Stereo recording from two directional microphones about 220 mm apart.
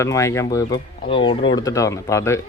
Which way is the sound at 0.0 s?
15° left (ahead or behind).